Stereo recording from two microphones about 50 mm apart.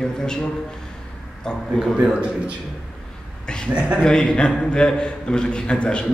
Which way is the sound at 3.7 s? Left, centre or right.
Right.